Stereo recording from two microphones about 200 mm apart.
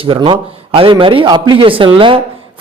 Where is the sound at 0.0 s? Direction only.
25° right (ahead or behind).